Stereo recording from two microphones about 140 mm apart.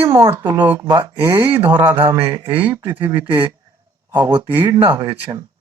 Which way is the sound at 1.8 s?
15° right (ahead or behind).